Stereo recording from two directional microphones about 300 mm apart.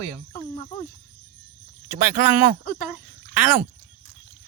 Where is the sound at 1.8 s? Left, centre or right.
Centre.